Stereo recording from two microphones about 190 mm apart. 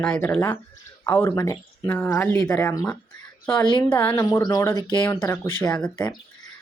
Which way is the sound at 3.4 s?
5° left (ahead or behind).